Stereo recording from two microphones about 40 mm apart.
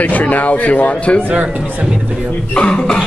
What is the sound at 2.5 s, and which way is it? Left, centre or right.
Throat clearing, left.